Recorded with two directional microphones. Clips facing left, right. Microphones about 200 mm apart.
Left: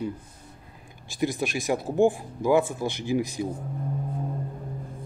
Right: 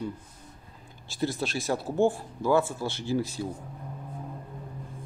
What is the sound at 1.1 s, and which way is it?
Speech, 15° left (ahead or behind).